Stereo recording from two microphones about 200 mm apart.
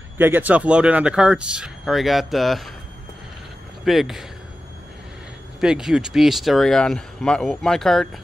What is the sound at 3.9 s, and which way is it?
Speech, centre (ahead or behind).